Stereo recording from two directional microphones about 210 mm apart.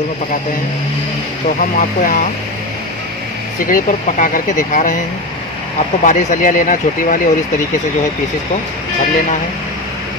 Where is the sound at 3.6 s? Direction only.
40° left (ahead or behind).